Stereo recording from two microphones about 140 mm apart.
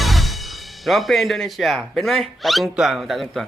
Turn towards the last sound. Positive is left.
turn(degrees=0)  # may be behind; listen again after turning